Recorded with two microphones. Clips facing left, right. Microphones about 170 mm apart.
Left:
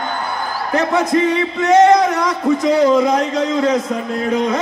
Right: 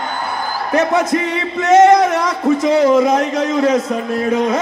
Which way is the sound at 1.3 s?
25° right (ahead or behind).